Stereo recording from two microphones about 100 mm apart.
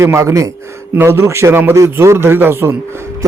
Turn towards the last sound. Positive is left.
turn(degrees=-25)  # may be behind; listen again after turning